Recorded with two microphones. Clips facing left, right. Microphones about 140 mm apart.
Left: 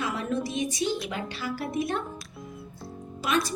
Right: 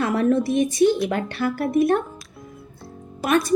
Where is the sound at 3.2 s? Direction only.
55° right (ahead or behind).